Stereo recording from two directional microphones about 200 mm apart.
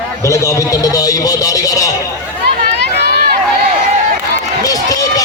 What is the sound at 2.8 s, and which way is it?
Run, 55° right (ahead or behind).